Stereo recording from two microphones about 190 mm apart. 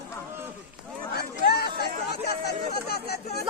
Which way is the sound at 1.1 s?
55° left (ahead or behind).